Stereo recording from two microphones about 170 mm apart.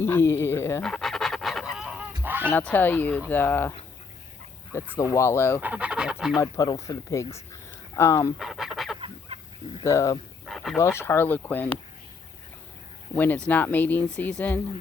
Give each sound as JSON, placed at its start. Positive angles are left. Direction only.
{"t": 0.0, "sound": "speech", "side_deg": 15}
{"t": 0.9, "sound": "pant", "side_deg": 0}
{"t": 2.5, "sound": "speech", "side_deg": 10}
{"t": 4.9, "sound": "speech", "side_deg": 15}
{"t": 5.5, "sound": "speech", "side_deg": -10}
{"t": 6.4, "sound": "speech", "side_deg": 20}
{"t": 7.5, "sound": "a sound", "side_deg": 15}
{"t": 8.4, "sound": "fowl", "side_deg": 0}
{"t": 9.0, "sound": "chicken", "side_deg": -30}
{"t": 9.8, "sound": "speech", "side_deg": 15}
{"t": 10.4, "sound": "a sound", "side_deg": 0}
{"t": 10.8, "sound": "speech", "side_deg": 15}
{"t": 13.1, "sound": "speech", "side_deg": 10}